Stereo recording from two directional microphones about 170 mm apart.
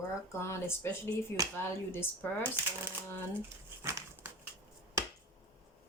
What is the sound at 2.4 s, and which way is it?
Speech, 10° right (ahead or behind).